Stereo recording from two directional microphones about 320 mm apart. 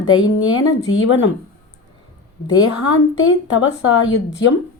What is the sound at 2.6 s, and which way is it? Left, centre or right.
Speech, left.